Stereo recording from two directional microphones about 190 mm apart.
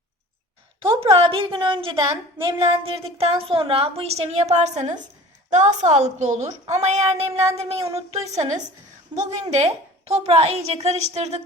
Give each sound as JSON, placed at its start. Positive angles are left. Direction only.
{"t": 1.1, "sound": "a woman's voice", "side_deg": -30}